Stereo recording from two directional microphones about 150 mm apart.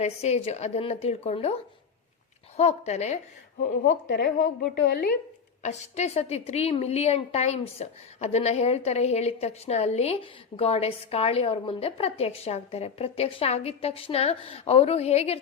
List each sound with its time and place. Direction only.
0.0 s a woman's voice: 45° left (ahead or behind)
2.6 s a woman's voice: 45° left (ahead or behind)
4.2 s a woman's voice: 80° left
5.6 s a woman's voice: 45° left (ahead or behind)